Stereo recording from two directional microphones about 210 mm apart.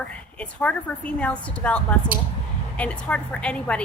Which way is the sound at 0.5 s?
5° left (ahead or behind).